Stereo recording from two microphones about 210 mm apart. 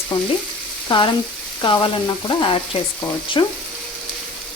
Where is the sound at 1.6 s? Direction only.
25° left (ahead or behind).